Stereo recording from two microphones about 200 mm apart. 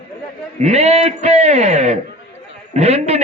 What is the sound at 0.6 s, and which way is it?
A man's voice, 30° right (ahead or behind).